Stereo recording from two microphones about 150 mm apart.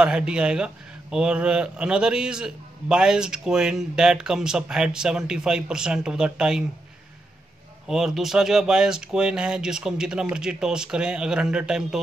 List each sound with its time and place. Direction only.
0.0 s a man's voice: 5° right (ahead or behind)
7.8 s a man's voice: centre (ahead or behind)